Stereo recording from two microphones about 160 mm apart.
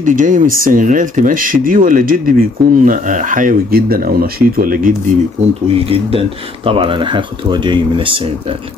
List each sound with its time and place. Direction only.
0.0 s speech: 55° right (ahead or behind)
5.9 s speech: 35° right (ahead or behind)